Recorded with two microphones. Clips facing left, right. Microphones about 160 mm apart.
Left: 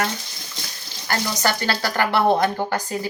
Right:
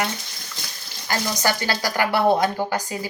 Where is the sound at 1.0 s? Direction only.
15° right (ahead or behind).